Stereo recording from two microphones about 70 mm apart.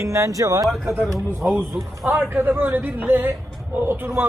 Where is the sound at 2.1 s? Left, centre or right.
Right.